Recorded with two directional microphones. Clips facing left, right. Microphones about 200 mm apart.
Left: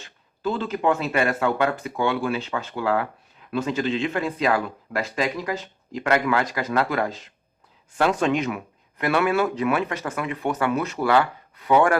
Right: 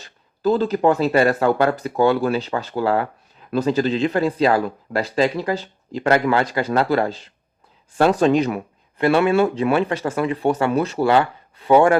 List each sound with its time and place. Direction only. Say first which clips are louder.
0.0 s speech: right 7 dB; 40° right (ahead or behind)